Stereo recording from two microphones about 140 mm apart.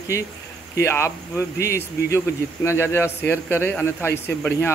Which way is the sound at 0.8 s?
20° left (ahead or behind).